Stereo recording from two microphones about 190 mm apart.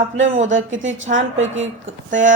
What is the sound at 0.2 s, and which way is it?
A woman's voice, 80° right.